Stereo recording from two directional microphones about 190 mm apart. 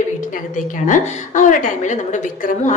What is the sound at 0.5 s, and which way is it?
A woman's voice, 40° left (ahead or behind).